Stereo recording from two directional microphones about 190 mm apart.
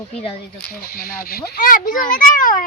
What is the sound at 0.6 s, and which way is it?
A child's voice, 55° left (ahead or behind).